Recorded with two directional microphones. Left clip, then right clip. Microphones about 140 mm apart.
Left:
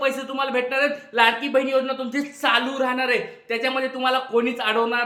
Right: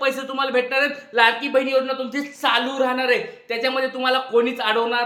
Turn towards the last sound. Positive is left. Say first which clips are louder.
# right 1 dB
turn(degrees=-15)  # may be behind; listen again after turning